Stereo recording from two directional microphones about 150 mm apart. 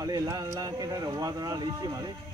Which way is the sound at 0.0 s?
25° right (ahead or behind).